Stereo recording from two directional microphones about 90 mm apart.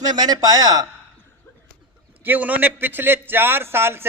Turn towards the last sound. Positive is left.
turn(degrees=-25)  # may be behind; listen again after turning